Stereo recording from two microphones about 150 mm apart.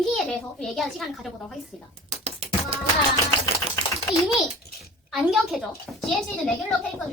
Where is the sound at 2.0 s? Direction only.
45° right (ahead or behind).